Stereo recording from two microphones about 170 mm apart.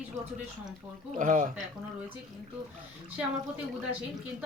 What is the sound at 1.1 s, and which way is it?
Speech, 50° right (ahead or behind).